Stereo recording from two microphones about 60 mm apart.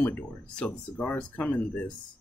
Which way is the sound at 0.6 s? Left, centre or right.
Centre.